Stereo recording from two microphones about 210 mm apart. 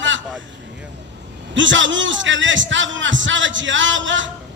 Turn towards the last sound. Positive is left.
turn(degrees=-65)  # may be behind; listen again after turning